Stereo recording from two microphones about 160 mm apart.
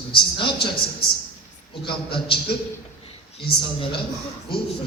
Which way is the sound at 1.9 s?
30° left (ahead or behind).